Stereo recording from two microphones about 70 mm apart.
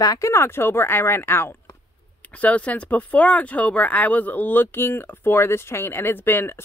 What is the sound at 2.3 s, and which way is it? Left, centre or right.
Speech, centre.